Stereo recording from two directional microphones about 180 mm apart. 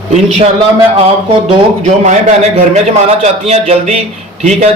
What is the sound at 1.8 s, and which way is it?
A man's voice, 40° right (ahead or behind).